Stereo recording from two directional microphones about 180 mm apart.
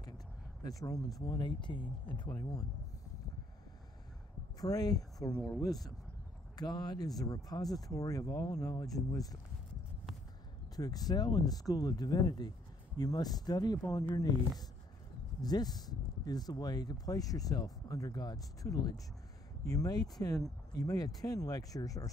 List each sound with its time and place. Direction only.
0.7 s speech: 20° left (ahead or behind)
4.6 s speech: 20° left (ahead or behind)
6.5 s speech: 20° left (ahead or behind)
10.8 s speech: 20° left (ahead or behind)
15.4 s speech: 20° left (ahead or behind)